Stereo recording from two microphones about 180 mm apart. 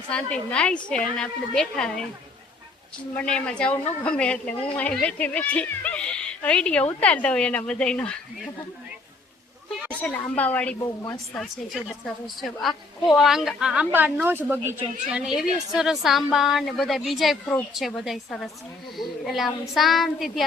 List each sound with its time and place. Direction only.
0.1 s speech: 5° left (ahead or behind)
3.2 s speech: 5° left (ahead or behind)
10.0 s speech: 10° left (ahead or behind)
11.3 s speech: centre (ahead or behind)